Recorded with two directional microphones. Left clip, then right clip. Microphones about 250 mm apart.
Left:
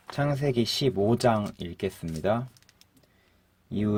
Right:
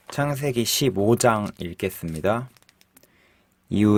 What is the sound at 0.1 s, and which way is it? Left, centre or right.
Speech, right.